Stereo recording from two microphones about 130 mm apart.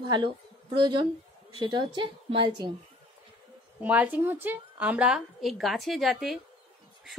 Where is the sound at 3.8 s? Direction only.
10° right (ahead or behind).